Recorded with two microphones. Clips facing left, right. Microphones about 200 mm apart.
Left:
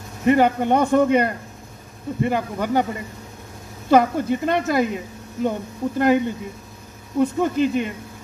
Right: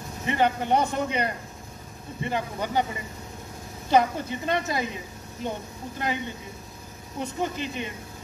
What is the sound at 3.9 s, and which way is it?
Speech, 55° left (ahead or behind).